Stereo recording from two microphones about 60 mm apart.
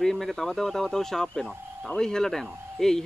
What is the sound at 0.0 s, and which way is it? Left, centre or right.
Speech, centre.